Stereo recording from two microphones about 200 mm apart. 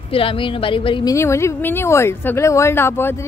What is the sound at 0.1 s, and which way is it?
Speech, 25° left (ahead or behind).